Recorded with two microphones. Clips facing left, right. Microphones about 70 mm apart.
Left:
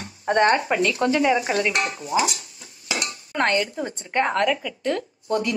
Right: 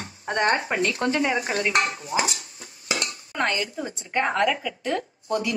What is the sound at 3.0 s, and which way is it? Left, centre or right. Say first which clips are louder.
Dishes: left 5 dB; left.